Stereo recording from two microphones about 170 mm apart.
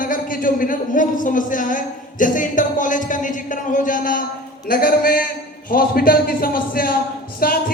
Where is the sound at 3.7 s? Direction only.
50° left (ahead or behind).